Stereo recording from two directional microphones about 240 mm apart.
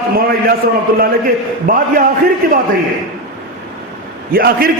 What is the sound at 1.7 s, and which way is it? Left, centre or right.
Speech, right.